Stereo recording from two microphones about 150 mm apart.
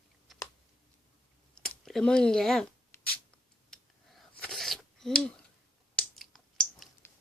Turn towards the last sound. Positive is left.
turn(degrees=0)  # may be behind; listen again after turning